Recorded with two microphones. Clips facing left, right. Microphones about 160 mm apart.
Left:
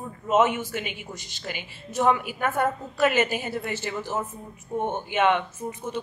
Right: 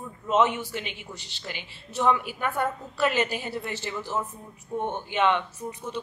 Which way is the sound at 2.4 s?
45° left (ahead or behind).